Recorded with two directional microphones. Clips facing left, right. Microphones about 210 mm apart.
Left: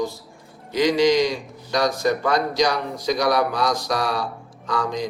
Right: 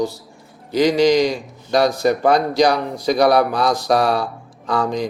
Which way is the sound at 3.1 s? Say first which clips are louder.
Right 6 dB; 60° right (ahead or behind).